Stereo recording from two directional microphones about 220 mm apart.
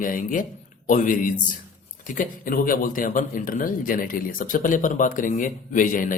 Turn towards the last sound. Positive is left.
turn(degrees=35)  # may be behind; listen again after turning